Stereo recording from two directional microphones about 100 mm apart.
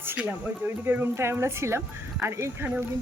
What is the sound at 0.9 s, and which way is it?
Speech, 25° right (ahead or behind).